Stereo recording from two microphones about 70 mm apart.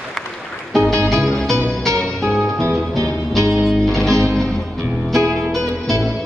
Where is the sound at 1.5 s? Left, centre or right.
Right.